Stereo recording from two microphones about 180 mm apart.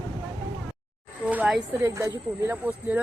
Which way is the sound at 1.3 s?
10° right (ahead or behind).